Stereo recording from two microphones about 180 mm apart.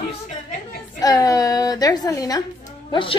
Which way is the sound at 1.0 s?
20° left (ahead or behind).